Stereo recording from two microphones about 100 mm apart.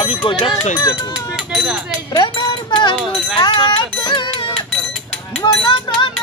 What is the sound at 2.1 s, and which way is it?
Cowbell, 45° left (ahead or behind).